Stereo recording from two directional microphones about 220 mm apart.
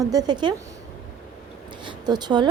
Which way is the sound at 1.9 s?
20° right (ahead or behind).